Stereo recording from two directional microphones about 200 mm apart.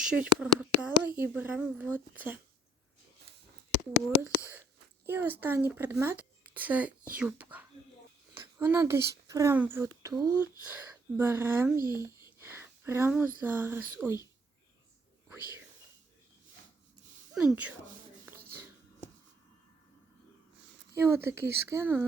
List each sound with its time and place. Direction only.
0.0 s speech: 5° right (ahead or behind)
5.0 s speech: 10° right (ahead or behind)
17.4 s speech: 10° right (ahead or behind)
20.9 s speech: 10° right (ahead or behind)